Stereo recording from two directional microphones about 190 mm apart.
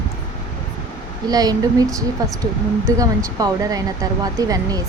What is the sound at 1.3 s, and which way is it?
Speech, 20° right (ahead or behind).